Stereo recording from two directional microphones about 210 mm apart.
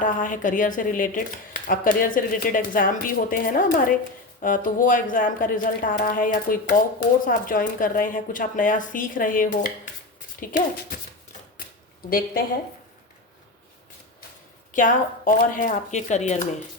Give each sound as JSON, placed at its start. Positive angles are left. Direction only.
{"t": 0.0, "sound": "speech", "side_deg": 40}
{"t": 14.7, "sound": "speech", "side_deg": 40}